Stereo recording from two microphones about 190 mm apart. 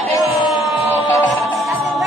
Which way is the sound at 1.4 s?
Centre (ahead or behind).